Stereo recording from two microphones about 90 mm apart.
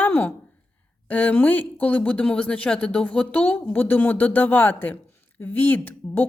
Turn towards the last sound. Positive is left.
turn(degrees=20)  # may be behind; listen again after turning